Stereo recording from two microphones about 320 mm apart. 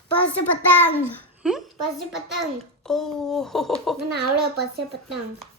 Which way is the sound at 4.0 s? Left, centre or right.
Right.